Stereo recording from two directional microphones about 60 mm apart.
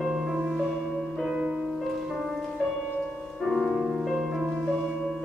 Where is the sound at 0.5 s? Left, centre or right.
Centre.